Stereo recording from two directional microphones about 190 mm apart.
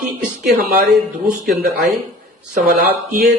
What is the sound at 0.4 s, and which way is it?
Speech, 50° right (ahead or behind).